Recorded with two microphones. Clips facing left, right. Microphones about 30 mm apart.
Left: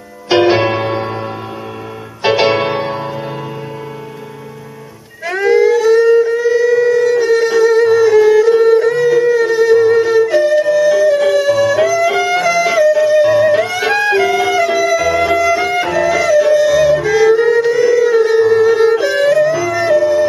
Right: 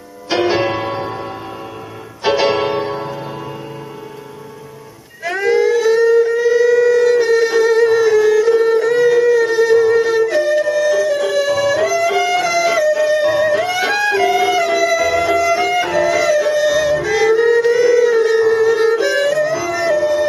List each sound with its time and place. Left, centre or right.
0.3 s music: left
0.6 s music: left
2.5 s music: left
5.2 s a sound: centre
6.0 s shofar: centre
6.4 s shofar: centre
8.1 s music: centre
8.9 s a sound: centre
9.2 s shofar: centre
9.8 s music: centre
10.2 s flute: centre
10.7 s music: centre